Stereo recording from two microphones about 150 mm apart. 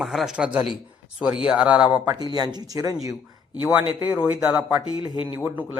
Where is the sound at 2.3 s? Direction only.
30° right (ahead or behind).